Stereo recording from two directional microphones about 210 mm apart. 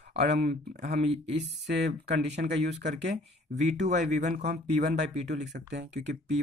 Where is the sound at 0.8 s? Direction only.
35° right (ahead or behind).